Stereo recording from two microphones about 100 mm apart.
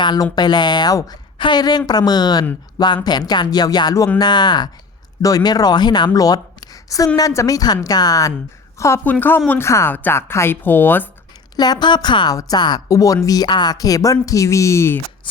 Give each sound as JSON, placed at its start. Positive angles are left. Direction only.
{"t": 0.0, "sound": "a woman's voice", "side_deg": 45}
{"t": 9.0, "sound": "a woman's voice", "side_deg": 20}
{"t": 11.5, "sound": "speech", "side_deg": 45}